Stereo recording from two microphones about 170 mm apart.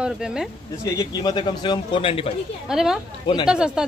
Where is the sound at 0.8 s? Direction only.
20° left (ahead or behind).